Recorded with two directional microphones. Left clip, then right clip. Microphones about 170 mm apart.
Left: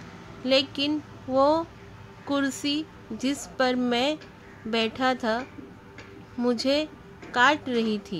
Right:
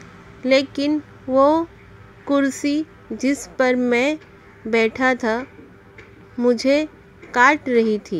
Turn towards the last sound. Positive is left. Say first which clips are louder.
# right 8 dB
turn(degrees=-30)  # may be behind; listen again after turning